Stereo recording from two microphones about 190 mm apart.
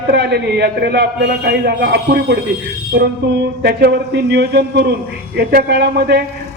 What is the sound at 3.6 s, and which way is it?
Speech, 60° right (ahead or behind).